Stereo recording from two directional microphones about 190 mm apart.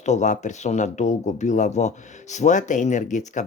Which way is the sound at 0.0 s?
40° left (ahead or behind).